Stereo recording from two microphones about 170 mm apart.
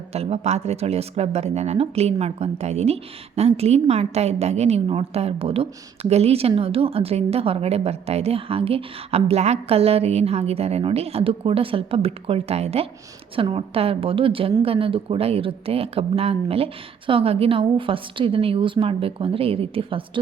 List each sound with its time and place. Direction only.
0.1 s a woman's voice: 40° right (ahead or behind)